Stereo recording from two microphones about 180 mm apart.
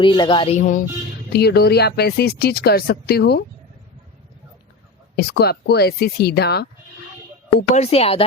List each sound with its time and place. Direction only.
0.0 s speech: 25° left (ahead or behind)
1.3 s speech: 65° left (ahead or behind)
5.1 s speech: 60° left (ahead or behind)
7.8 s speech: 35° left (ahead or behind)